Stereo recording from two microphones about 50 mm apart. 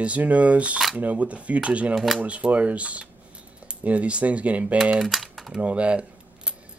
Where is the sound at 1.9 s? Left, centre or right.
Centre.